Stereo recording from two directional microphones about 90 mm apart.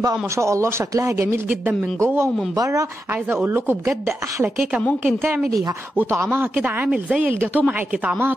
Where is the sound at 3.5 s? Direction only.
25° right (ahead or behind).